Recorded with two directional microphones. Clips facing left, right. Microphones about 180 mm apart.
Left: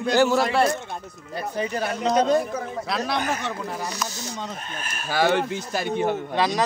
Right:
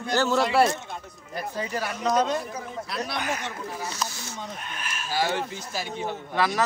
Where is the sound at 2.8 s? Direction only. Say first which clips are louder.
Left 5 dB; 90° left.